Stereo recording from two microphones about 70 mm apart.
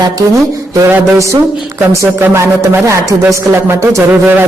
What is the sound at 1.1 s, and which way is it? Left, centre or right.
Speech, right.